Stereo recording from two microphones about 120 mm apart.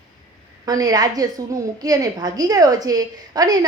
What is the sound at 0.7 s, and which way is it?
A woman's voice, 30° right (ahead or behind).